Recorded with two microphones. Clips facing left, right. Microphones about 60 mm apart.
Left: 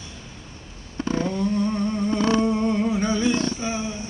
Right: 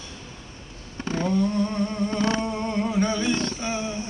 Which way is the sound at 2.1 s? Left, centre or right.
Centre.